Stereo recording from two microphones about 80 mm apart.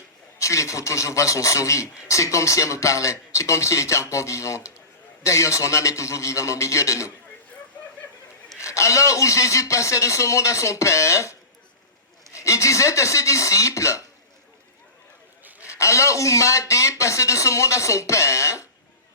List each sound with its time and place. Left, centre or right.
0.3 s a man's voice: left
8.5 s a man's voice: left
15.6 s a man's voice: left